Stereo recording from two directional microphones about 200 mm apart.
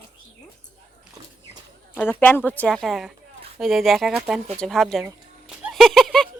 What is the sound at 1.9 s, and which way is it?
Speech, 10° left (ahead or behind).